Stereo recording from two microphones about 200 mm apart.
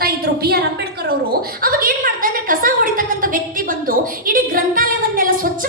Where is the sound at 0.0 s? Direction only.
50° right (ahead or behind).